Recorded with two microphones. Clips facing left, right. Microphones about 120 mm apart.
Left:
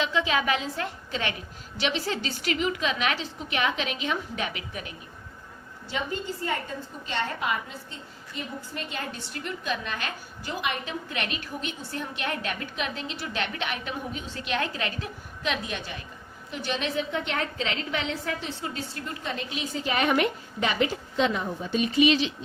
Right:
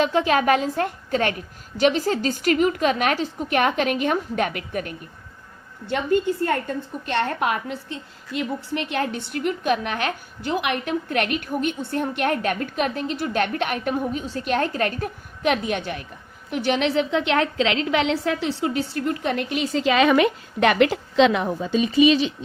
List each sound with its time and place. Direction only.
0.0 s a woman's voice: 50° right (ahead or behind); by 21.7 s 90° right